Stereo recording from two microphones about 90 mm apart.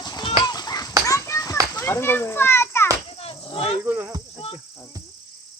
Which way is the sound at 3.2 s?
90° left.